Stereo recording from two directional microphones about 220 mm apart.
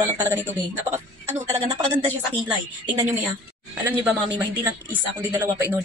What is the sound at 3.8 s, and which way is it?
Speech, 10° right (ahead or behind).